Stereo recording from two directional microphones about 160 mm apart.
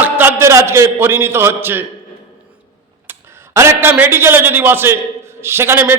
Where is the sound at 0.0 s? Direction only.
15° right (ahead or behind).